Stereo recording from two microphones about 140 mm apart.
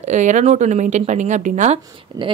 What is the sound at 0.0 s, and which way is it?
Speech, 60° right (ahead or behind).